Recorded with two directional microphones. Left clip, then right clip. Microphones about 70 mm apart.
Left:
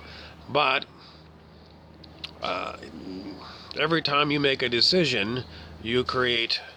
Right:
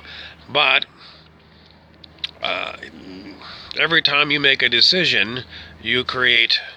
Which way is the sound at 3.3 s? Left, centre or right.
Left.